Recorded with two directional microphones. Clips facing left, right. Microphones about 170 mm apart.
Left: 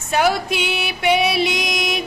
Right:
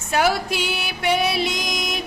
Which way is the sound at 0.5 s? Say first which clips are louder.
Left 3 dB; 60° left (ahead or behind).